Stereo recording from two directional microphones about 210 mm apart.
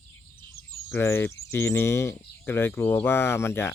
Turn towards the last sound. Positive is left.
turn(degrees=10)  # may be behind; listen again after turning